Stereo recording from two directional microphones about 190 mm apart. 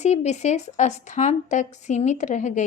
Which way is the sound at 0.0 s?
35° left (ahead or behind).